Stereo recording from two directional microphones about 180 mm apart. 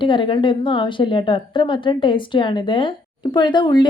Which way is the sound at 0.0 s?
25° left (ahead or behind).